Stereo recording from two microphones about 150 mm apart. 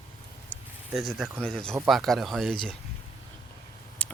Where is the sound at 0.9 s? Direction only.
Centre (ahead or behind).